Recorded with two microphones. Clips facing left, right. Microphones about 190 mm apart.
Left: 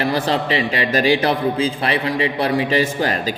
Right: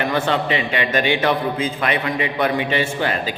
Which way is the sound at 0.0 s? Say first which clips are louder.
Left 1 dB; 35° left (ahead or behind).